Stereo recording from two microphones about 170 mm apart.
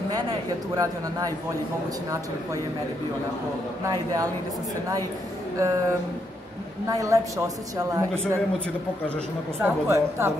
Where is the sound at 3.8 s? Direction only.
20° right (ahead or behind).